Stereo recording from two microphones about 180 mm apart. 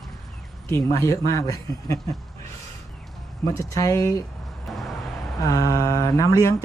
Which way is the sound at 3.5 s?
20° left (ahead or behind).